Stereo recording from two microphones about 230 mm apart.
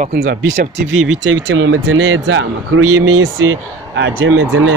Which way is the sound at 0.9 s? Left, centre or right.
Right.